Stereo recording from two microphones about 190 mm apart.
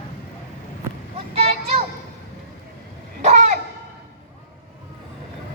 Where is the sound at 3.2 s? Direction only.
35° right (ahead or behind).